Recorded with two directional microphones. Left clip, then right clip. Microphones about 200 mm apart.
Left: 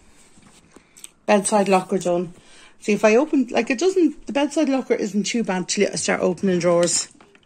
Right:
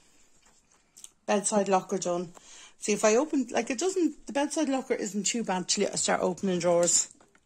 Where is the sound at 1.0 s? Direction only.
5° left (ahead or behind).